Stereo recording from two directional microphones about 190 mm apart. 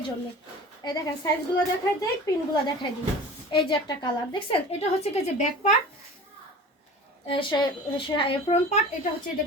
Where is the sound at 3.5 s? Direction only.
25° left (ahead or behind).